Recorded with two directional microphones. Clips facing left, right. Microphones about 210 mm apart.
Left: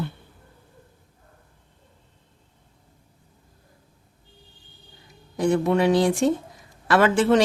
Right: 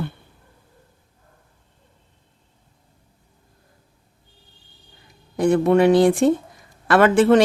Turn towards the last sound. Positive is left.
turn(degrees=-55)  # may be behind; listen again after turning